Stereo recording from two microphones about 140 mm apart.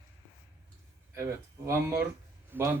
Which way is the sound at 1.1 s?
20° right (ahead or behind).